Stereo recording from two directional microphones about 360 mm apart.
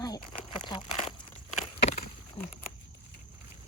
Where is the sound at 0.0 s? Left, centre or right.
Centre.